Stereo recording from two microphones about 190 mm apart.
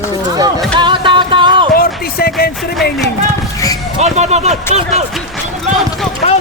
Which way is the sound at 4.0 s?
35° right (ahead or behind).